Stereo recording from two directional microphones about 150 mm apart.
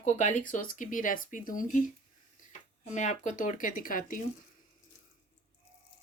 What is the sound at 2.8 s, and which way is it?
Speech, 50° left (ahead or behind).